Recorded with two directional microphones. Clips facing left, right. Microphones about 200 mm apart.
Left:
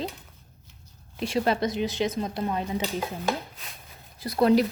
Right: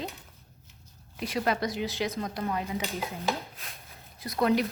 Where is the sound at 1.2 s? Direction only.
30° left (ahead or behind).